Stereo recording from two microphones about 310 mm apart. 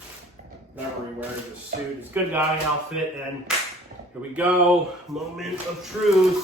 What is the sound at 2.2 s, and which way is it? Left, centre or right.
Speech, centre.